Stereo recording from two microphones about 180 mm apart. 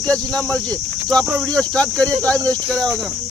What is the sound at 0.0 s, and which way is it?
Speech, 5° left (ahead or behind).